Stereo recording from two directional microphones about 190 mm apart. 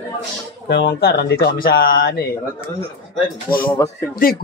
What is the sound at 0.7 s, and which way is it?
Speech, 60° left (ahead or behind).